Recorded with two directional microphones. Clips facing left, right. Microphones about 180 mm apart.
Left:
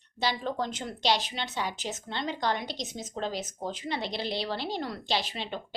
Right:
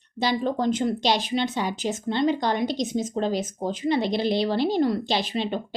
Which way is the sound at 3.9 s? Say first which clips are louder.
Right 11 dB; 15° right (ahead or behind).